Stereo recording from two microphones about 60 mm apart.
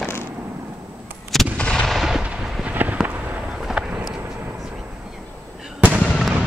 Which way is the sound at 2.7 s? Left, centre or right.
Right.